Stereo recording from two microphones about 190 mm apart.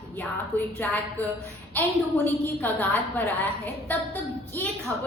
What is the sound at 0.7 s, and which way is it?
A woman's voice, 10° left (ahead or behind).